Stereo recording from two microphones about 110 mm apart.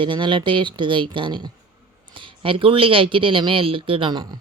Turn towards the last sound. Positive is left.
turn(degrees=-55)  # may be behind; listen again after turning